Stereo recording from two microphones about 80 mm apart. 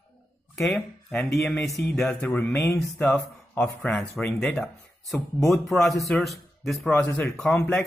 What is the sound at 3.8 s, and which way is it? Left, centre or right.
Speech, centre.